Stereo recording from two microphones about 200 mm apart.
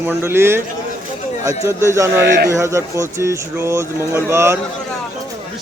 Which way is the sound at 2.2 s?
60° right (ahead or behind).